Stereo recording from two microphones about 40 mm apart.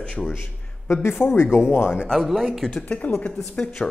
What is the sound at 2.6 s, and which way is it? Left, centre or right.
Speech, left.